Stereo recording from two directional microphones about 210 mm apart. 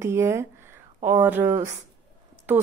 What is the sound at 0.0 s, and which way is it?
Speech, 10° right (ahead or behind).